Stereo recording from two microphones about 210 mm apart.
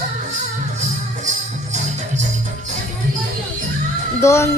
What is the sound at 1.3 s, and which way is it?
Music, 35° right (ahead or behind).